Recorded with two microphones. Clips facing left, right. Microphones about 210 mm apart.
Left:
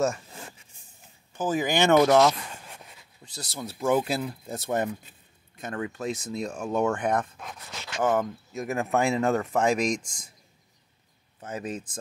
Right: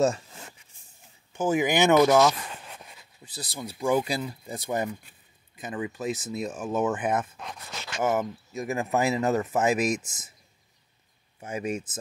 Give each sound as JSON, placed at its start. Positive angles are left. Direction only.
{"t": 1.3, "sound": "speech", "side_deg": -10}
{"t": 11.4, "sound": "speech", "side_deg": -10}